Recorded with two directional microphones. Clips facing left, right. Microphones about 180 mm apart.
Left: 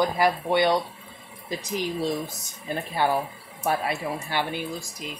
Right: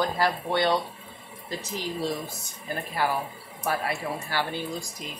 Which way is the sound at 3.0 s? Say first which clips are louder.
Left 3 dB; 25° left (ahead or behind).